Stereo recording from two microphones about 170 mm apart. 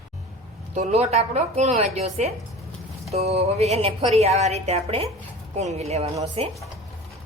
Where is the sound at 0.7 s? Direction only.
40° right (ahead or behind).